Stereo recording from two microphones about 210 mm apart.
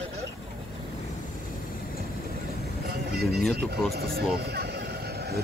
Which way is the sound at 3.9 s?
45° right (ahead or behind).